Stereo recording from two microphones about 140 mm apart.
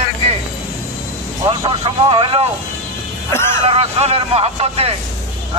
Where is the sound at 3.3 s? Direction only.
20° left (ahead or behind).